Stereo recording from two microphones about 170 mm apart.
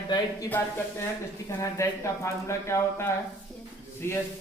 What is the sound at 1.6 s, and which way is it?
Speech, 15° left (ahead or behind).